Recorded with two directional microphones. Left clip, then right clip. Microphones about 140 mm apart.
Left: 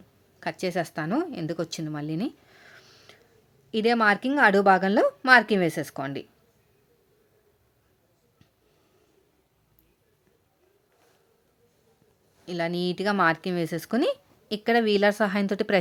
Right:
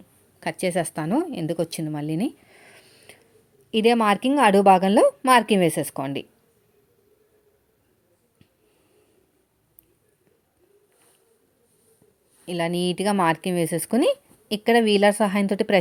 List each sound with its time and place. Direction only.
0.3 s a woman's voice: 20° right (ahead or behind)
12.5 s a woman's voice: 20° right (ahead or behind)